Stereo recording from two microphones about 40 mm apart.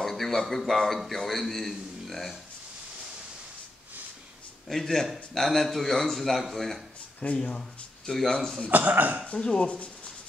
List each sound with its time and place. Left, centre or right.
0.0 s a man's voice: centre
4.7 s a man's voice: centre
7.3 s speech: left
8.4 s speech: centre
8.6 s speech: right
9.4 s speech: left